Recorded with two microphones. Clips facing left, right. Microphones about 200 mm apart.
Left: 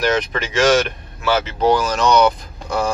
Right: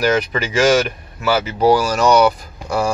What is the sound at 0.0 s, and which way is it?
Speech, 5° right (ahead or behind).